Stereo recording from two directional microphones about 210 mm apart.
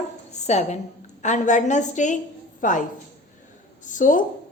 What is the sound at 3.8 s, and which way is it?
Speech, 40° left (ahead or behind).